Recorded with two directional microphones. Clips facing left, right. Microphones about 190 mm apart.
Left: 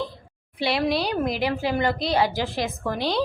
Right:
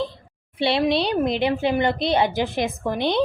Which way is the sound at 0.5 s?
25° right (ahead or behind).